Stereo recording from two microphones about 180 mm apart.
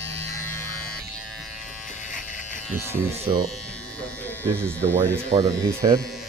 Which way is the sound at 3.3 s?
25° right (ahead or behind).